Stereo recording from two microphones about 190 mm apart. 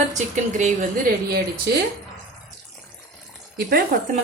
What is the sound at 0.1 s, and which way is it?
Speech, 40° right (ahead or behind).